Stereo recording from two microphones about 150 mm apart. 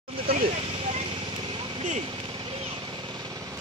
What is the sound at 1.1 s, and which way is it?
Vehicle, 35° right (ahead or behind).